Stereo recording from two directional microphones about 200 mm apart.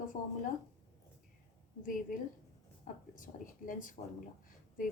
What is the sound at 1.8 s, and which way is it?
A woman's voice, 45° left (ahead or behind).